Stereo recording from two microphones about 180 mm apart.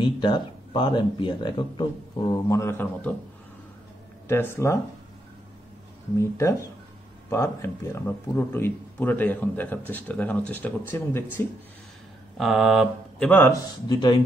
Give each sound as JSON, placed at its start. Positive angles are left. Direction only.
{"t": 0.0, "sound": "speech", "side_deg": 25}
{"t": 2.5, "sound": "speech", "side_deg": 15}
{"t": 4.3, "sound": "speech", "side_deg": 15}
{"t": 6.1, "sound": "speech", "side_deg": 15}
{"t": 12.4, "sound": "speech", "side_deg": 0}
{"t": 13.3, "sound": "speech", "side_deg": 15}
{"t": 13.8, "sound": "speech", "side_deg": 25}